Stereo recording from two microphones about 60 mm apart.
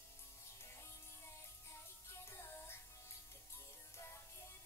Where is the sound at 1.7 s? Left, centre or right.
Left.